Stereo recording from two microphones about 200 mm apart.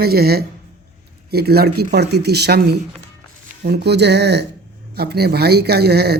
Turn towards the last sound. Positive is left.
turn(degrees=-55)  # may be behind; listen again after turning